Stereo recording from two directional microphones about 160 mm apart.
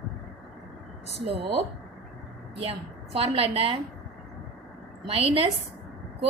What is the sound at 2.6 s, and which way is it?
A woman's voice, 35° right (ahead or behind).